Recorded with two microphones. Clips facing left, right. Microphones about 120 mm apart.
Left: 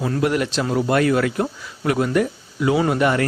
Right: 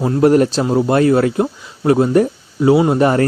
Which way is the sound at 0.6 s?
25° right (ahead or behind).